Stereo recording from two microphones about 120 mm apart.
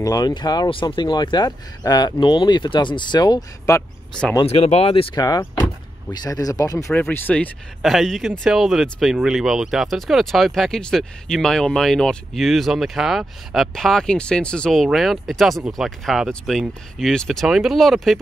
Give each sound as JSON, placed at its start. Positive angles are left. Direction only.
{"t": 0.0, "sound": "speech", "side_deg": 30}
{"t": 4.5, "sound": "speech", "side_deg": 60}
{"t": 5.1, "sound": "speech", "side_deg": 35}
{"t": 6.9, "sound": "speech", "side_deg": 15}
{"t": 7.8, "sound": "speech", "side_deg": 0}